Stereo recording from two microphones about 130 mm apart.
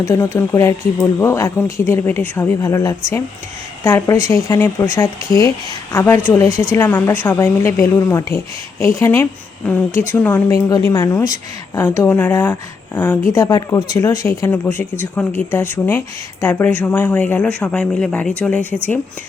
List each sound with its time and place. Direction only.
0.0 s speech: 25° left (ahead or behind)
10.8 s speech: 25° left (ahead or behind)
13.3 s speech: 25° left (ahead or behind); by 18.8 s 10° left (ahead or behind)